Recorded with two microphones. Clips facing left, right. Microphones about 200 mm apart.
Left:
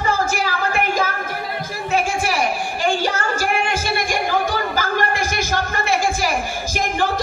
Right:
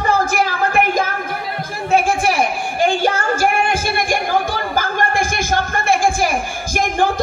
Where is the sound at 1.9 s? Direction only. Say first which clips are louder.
Right 5 dB; 55° right (ahead or behind).